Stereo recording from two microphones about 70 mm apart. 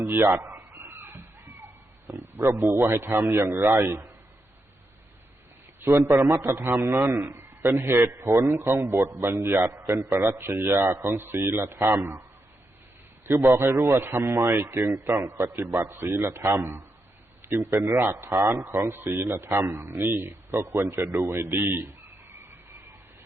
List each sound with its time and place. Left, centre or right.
0.0 s a sound: right
2.0 s a man's voice: right
5.8 s a man's voice: right
13.2 s a man's voice: right